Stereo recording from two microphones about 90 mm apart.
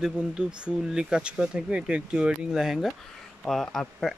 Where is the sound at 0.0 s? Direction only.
10° right (ahead or behind).